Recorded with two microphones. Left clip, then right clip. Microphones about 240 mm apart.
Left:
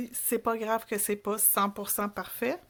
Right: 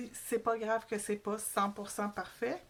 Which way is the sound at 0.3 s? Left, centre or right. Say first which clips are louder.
Left 4 dB; left.